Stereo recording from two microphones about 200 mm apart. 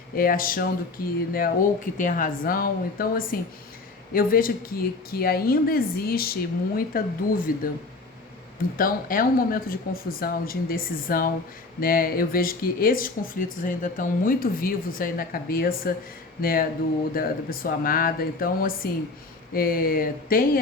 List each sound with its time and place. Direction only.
0.2 s speech: 45° left (ahead or behind)
8.8 s speech: 45° left (ahead or behind)